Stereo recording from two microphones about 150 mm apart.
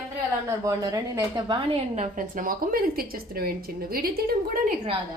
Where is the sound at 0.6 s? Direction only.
20° right (ahead or behind).